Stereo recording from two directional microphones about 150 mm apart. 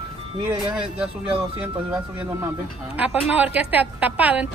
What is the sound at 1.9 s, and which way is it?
A woman's voice, 20° right (ahead or behind).